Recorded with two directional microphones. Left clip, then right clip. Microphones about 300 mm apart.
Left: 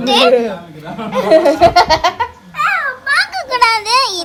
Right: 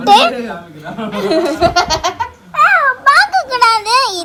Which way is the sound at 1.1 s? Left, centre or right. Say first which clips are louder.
Left 5 dB; left.